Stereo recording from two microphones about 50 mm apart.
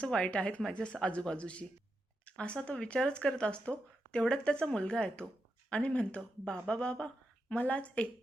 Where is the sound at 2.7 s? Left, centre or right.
Left.